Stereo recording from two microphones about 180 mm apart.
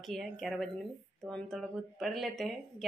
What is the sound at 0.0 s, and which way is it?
A woman's voice, centre (ahead or behind).